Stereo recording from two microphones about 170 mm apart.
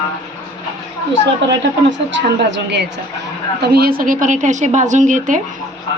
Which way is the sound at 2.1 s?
85° right.